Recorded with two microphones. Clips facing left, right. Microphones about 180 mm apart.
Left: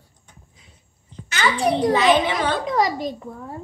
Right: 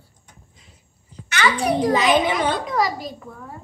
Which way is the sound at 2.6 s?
25° left (ahead or behind).